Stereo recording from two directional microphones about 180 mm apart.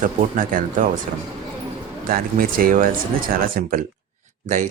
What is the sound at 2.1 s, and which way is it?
Speech, 55° right (ahead or behind).